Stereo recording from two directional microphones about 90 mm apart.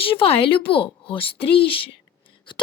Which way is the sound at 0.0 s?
90° left.